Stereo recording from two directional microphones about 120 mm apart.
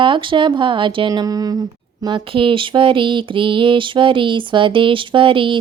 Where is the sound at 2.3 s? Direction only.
45° right (ahead or behind).